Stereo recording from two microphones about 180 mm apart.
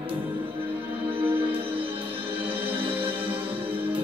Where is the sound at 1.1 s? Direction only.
30° right (ahead or behind).